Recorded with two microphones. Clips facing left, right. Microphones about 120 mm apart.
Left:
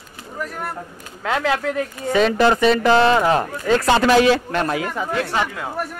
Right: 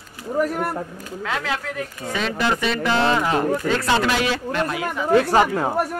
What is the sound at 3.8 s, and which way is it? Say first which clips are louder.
Speech: left 6 dB; 55° left (ahead or behind).